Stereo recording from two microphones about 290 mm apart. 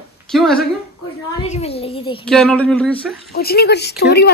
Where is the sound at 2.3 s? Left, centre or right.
Centre.